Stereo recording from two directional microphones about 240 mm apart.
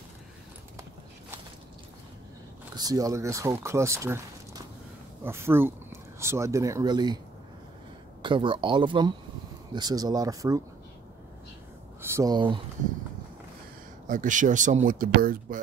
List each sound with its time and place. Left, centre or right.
2.7 s speech: centre
5.2 s speech: centre
8.2 s speech: right
12.2 s speech: centre
14.0 s speech: right